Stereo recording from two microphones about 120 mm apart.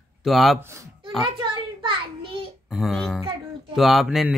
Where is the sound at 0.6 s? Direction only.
20° right (ahead or behind).